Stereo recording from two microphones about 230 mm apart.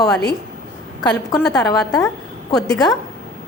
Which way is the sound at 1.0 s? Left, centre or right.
Centre.